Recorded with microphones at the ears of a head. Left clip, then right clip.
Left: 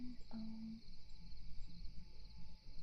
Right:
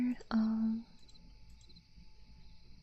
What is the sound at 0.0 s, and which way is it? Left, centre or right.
Whispering, right.